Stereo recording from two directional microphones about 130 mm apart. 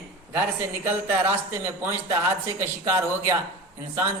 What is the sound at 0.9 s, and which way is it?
Speech, 20° right (ahead or behind).